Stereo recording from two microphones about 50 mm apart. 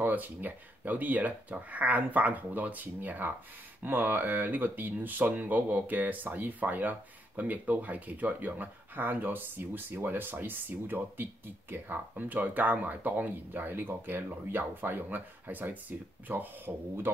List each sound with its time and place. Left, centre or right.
0.0 s speech: right